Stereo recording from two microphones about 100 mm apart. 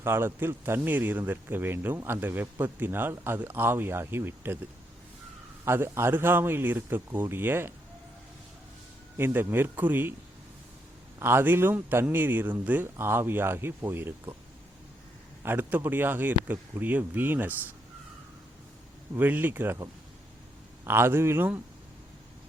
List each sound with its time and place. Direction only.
0.0 s speech: 25° right (ahead or behind)
5.6 s speech: 25° right (ahead or behind)
9.1 s speech: 20° right (ahead or behind)
11.2 s speech: 25° right (ahead or behind)
15.4 s speech: 20° right (ahead or behind)
19.1 s speech: 20° right (ahead or behind)